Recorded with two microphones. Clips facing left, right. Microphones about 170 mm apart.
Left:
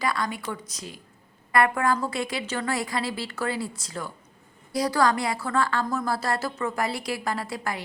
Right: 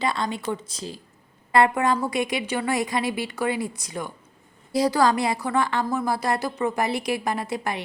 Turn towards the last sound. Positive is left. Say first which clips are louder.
# right 3 dB
turn(degrees=-20)  # may be behind; listen again after turning